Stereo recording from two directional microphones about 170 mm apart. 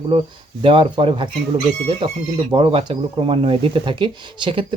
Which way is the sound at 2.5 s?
30° right (ahead or behind).